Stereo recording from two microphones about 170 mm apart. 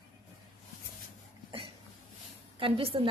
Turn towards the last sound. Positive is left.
turn(degrees=-35)  # may be behind; listen again after turning